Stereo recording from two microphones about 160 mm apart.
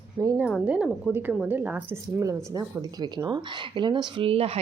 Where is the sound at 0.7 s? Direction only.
5° right (ahead or behind).